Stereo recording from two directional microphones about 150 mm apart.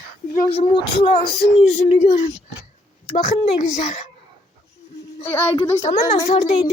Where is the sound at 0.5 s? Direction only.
40° left (ahead or behind).